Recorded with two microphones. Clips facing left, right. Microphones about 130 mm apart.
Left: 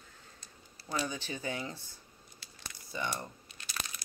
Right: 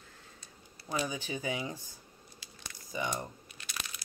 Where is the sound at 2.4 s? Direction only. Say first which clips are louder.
Even; 15° right (ahead or behind).